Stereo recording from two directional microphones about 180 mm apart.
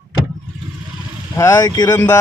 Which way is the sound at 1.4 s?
15° left (ahead or behind).